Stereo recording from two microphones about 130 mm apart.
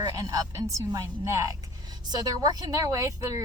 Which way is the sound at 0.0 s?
25° right (ahead or behind).